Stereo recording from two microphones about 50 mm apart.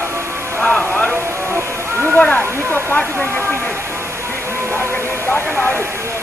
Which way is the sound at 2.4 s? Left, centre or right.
Centre.